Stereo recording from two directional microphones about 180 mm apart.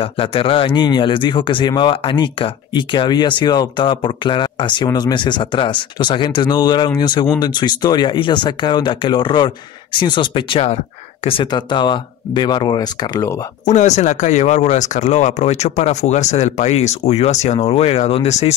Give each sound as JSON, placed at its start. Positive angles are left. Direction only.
{"t": 0.0, "sound": "speech", "side_deg": 30}
{"t": 13.7, "sound": "speech", "side_deg": 40}